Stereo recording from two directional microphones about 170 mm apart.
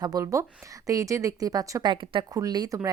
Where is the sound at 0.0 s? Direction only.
20° right (ahead or behind).